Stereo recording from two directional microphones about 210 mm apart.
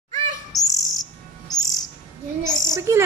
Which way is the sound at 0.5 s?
15° left (ahead or behind).